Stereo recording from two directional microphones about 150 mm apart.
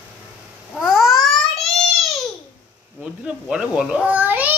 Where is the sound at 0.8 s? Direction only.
5° right (ahead or behind).